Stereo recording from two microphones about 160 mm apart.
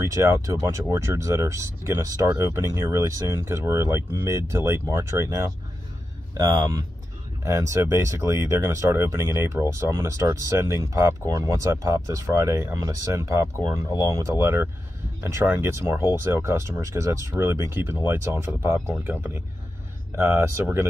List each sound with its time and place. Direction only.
0.1 s speech: 15° right (ahead or behind)
6.3 s speech: 20° right (ahead or behind)